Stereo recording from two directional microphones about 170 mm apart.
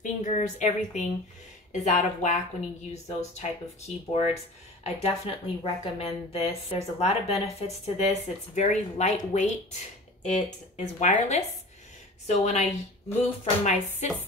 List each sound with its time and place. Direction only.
0.0 s speech: 45° left (ahead or behind)